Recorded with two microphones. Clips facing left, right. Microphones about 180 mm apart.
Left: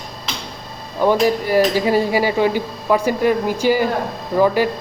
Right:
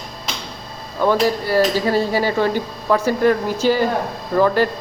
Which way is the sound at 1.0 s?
15° left (ahead or behind).